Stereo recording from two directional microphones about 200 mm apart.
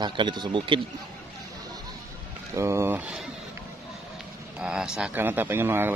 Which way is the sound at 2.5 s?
15° right (ahead or behind).